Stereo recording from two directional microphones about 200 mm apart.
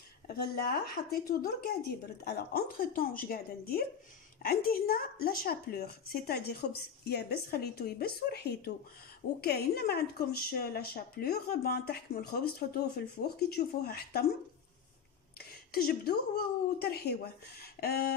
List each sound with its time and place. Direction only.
0.4 s speech: 50° left (ahead or behind)
15.3 s a woman's voice: 50° left (ahead or behind)